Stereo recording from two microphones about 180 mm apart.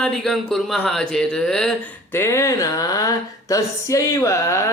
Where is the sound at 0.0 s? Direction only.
5° left (ahead or behind).